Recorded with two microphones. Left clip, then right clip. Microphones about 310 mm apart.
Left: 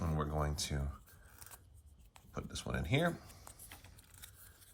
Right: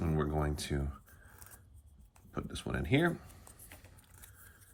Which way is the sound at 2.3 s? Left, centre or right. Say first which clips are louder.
Right 3 dB; centre.